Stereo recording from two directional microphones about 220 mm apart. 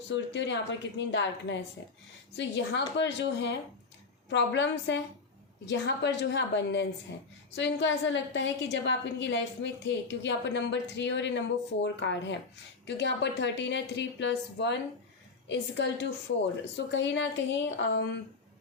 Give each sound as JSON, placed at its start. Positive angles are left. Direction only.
{"t": 0.1, "sound": "a woman's voice", "side_deg": 55}